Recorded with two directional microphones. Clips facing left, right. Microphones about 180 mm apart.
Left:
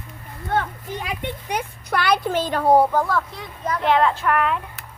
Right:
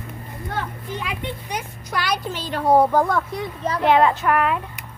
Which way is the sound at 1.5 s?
60° left (ahead or behind).